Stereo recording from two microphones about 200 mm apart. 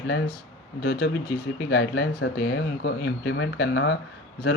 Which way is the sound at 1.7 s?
55° left (ahead or behind).